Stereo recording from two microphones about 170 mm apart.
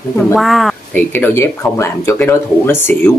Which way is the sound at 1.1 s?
15° left (ahead or behind).